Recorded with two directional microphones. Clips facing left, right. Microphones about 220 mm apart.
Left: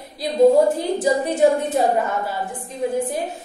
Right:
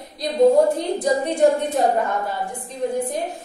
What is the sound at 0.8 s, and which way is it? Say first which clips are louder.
Speech: left 1 dB; 5° left (ahead or behind).